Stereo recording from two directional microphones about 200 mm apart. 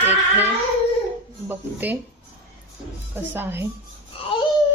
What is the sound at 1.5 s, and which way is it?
Speech, 10° right (ahead or behind).